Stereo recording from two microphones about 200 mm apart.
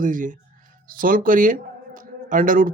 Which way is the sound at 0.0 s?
40° right (ahead or behind).